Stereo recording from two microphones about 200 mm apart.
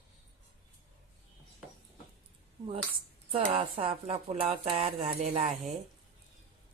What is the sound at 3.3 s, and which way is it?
Speech, 30° right (ahead or behind).